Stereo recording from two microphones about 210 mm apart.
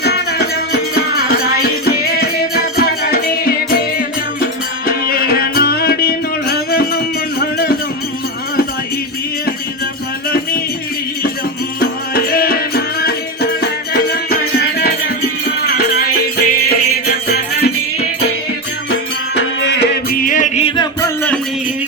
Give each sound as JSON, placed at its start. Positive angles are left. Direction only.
{"t": 0.0, "sound": "music", "side_deg": 50}
{"t": 11.8, "sound": "music", "side_deg": 45}
{"t": 19.4, "sound": "music", "side_deg": 55}